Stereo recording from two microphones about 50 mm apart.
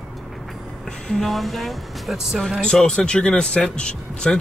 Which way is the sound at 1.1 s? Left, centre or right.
Centre.